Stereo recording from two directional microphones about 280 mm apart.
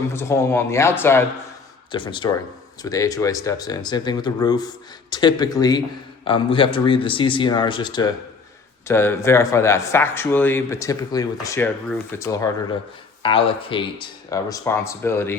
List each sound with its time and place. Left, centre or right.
0.1 s speech: centre